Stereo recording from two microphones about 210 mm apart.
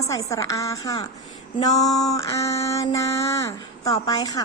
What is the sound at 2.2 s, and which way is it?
A woman's voice, 15° left (ahead or behind).